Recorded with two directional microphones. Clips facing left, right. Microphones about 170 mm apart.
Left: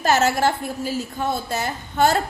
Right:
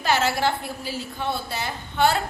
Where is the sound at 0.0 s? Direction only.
45° left (ahead or behind).